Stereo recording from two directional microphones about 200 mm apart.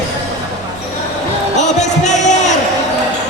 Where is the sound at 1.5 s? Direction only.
35° left (ahead or behind).